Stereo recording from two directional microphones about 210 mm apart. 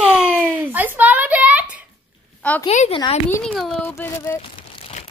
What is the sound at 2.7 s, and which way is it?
Speech, 30° left (ahead or behind).